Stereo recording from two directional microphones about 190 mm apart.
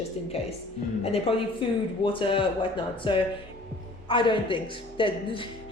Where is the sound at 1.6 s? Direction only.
30° left (ahead or behind).